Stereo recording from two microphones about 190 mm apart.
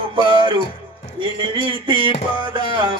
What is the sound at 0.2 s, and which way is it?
Music, 25° right (ahead or behind).